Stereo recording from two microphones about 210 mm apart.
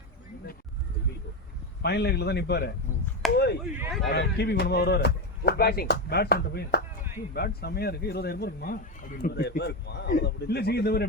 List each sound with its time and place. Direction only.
1.8 s a man's voice: 50° left (ahead or behind)
3.3 s chop: 50° left (ahead or behind)
4.1 s a man's voice: 50° left (ahead or behind)